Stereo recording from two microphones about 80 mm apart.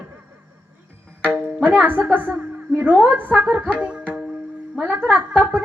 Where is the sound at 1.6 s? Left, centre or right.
Right.